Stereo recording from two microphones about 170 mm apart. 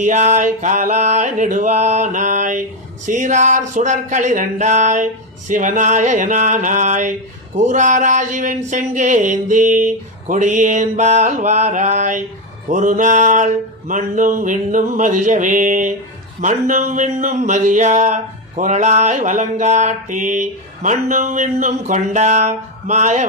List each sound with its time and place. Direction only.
0.0 s speech: 45° right (ahead or behind)